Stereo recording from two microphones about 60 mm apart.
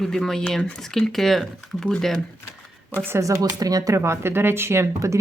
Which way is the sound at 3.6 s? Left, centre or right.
Right.